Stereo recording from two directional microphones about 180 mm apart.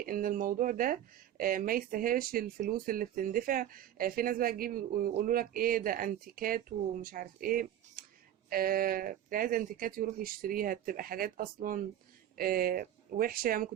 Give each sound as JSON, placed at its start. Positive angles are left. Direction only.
{"t": 0.0, "sound": "speech", "side_deg": -50}